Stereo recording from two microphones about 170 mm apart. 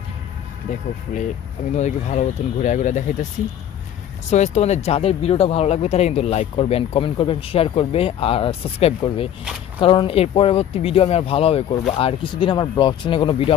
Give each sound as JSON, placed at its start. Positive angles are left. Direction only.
{"t": 0.7, "sound": "speech", "side_deg": 45}
{"t": 4.3, "sound": "speech", "side_deg": 40}